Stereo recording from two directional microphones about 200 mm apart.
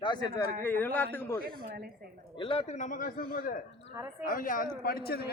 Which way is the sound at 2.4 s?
30° left (ahead or behind).